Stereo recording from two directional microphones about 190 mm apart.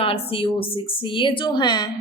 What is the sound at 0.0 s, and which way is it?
A woman's voice, 30° left (ahead or behind).